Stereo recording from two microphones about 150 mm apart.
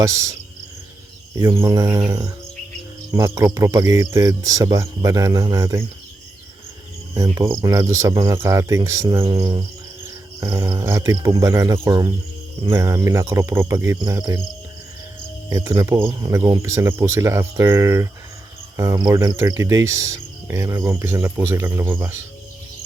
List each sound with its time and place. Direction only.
0.0 s speech: 20° right (ahead or behind)
1.4 s speech: 20° right (ahead or behind)
7.1 s speech: 25° right (ahead or behind)
15.4 s speech: 20° right (ahead or behind)